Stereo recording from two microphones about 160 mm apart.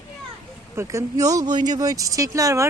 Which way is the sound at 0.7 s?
15° right (ahead or behind).